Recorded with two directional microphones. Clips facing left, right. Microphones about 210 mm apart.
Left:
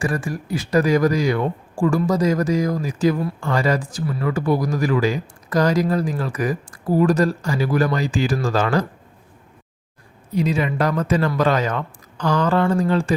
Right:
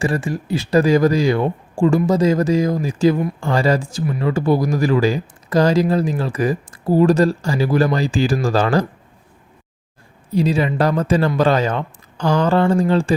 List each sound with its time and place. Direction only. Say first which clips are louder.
0.0 s speech: right 3 dB; 25° right (ahead or behind)
10.3 s speech: right 3 dB; 30° right (ahead or behind)